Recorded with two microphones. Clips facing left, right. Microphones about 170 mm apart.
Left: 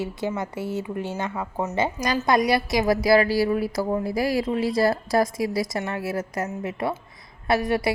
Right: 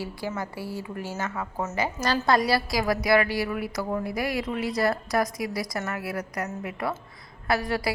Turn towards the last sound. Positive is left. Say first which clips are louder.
# left 4 dB
turn(degrees=20)  # may be behind; listen again after turning